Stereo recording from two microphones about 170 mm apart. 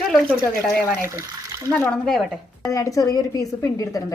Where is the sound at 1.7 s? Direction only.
10° left (ahead or behind).